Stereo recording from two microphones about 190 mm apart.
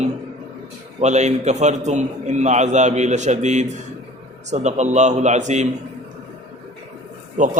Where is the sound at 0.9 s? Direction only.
35° right (ahead or behind).